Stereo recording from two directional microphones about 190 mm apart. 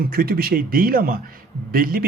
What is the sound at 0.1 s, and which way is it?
Speech, 50° right (ahead or behind).